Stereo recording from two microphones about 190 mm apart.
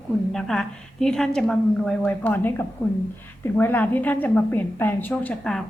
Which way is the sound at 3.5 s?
10° left (ahead or behind).